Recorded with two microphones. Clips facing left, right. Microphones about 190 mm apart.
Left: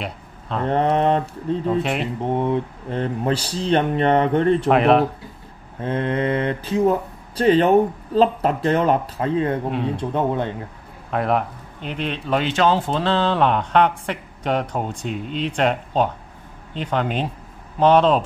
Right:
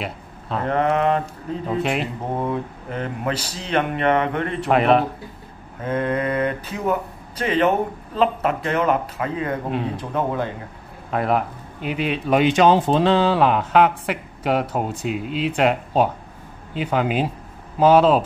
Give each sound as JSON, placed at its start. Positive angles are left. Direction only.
{"t": 0.0, "sound": "a sound", "side_deg": 0}
{"t": 0.7, "sound": "speech", "side_deg": 30}
{"t": 1.7, "sound": "a man's voice", "side_deg": 0}
{"t": 2.3, "sound": "speech", "side_deg": 25}
{"t": 4.6, "sound": "a man's voice", "side_deg": 0}
{"t": 5.8, "sound": "a man's voice", "side_deg": 30}
{"t": 11.1, "sound": "a man's voice", "side_deg": 0}